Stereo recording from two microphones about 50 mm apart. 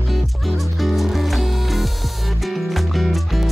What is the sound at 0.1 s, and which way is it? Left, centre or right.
Music, centre.